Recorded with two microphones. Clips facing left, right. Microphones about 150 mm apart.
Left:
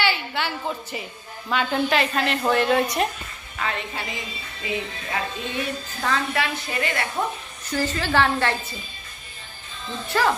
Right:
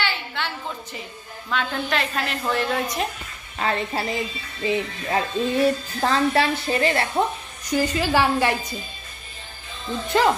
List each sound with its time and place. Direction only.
0.0 s a sound: 10° left (ahead or behind)
1.5 s a woman's voice: 5° left (ahead or behind)
3.5 s music: 35° right (ahead or behind)
7.7 s a woman's voice: 15° right (ahead or behind)
10.1 s speech: 20° right (ahead or behind)